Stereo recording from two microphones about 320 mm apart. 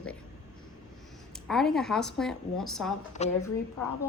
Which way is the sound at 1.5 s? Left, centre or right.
Centre.